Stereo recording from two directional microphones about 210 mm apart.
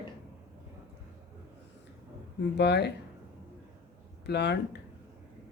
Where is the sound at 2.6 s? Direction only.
55° left (ahead or behind).